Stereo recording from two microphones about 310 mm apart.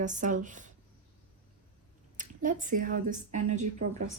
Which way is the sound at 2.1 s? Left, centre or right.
Right.